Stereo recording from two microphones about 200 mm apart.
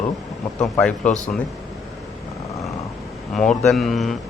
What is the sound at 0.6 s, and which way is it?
Speech, 5° left (ahead or behind).